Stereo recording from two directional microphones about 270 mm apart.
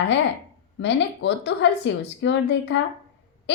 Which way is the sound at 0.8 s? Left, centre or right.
Left.